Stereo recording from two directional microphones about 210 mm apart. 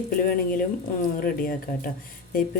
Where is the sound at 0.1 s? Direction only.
40° left (ahead or behind).